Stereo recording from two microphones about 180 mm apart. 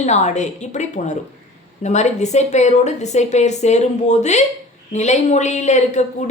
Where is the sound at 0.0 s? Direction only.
40° left (ahead or behind).